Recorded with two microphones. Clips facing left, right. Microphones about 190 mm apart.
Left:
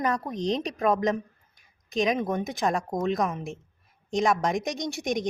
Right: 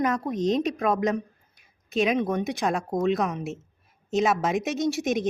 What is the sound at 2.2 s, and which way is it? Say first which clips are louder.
A woman's voice: right 2 dB; centre (ahead or behind).